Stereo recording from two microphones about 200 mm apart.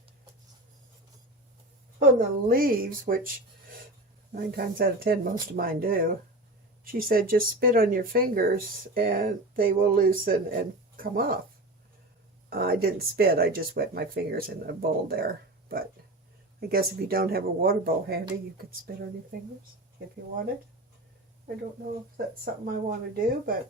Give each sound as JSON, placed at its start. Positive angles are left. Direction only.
{"t": 2.0, "sound": "speech", "side_deg": -45}
{"t": 4.4, "sound": "speech", "side_deg": -50}
{"t": 12.5, "sound": "speech", "side_deg": -50}
{"t": 22.9, "sound": "speech", "side_deg": -50}